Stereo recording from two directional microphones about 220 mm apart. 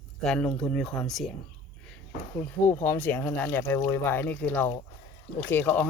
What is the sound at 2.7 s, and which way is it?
Speech, 10° left (ahead or behind).